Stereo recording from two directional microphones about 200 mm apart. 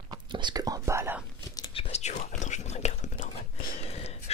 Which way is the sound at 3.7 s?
30° left (ahead or behind).